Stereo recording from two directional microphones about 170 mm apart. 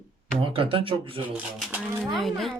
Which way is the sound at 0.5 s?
30° right (ahead or behind).